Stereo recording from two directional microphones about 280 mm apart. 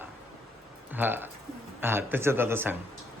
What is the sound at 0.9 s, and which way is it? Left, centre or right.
Speech, centre.